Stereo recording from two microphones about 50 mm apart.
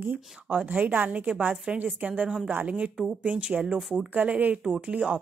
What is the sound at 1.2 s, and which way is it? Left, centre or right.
A woman's voice, right.